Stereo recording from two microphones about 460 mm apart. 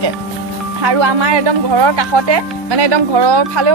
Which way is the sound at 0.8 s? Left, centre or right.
Right.